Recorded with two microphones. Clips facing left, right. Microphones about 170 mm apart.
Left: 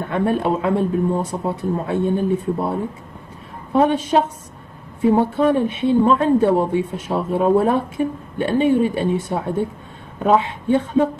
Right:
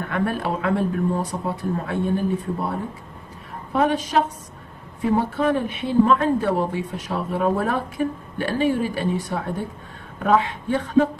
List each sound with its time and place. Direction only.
0.0 s a woman's voice: 25° left (ahead or behind)